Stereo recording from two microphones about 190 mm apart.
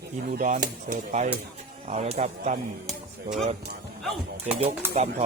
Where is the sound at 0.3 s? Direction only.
45° right (ahead or behind).